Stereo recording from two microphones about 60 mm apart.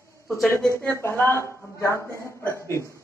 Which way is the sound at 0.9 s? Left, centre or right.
Left.